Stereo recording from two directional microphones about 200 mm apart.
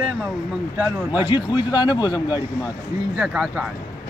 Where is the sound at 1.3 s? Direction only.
25° left (ahead or behind).